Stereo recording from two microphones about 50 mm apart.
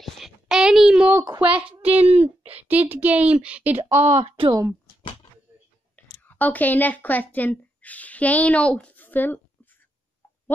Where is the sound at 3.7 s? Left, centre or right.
Right.